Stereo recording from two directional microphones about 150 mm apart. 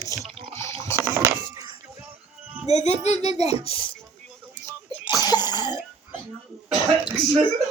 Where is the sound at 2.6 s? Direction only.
50° left (ahead or behind).